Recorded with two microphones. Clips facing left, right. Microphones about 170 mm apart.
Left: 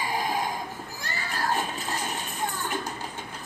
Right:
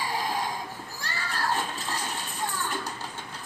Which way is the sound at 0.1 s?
15° left (ahead or behind).